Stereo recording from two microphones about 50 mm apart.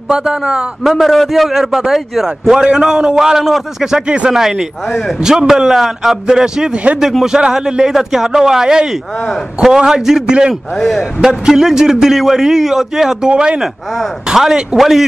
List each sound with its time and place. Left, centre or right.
0.1 s a man's voice: centre
0.8 s a man's voice: centre
4.8 s a man's voice: centre
5.2 s a man's voice: centre
7.0 s a man's voice: centre
10.5 s a man's voice: centre
11.1 s a man's voice: centre
13.3 s a man's voice: right